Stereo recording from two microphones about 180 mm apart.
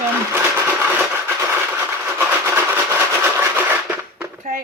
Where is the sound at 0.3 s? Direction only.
10° right (ahead or behind).